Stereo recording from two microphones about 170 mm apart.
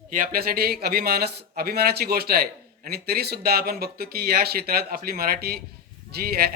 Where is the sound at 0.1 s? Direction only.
55° right (ahead or behind).